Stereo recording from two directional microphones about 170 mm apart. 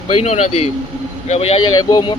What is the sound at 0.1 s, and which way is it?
Speech, 40° left (ahead or behind).